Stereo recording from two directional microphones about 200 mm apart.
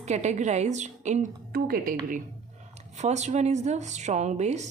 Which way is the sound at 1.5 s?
45° right (ahead or behind).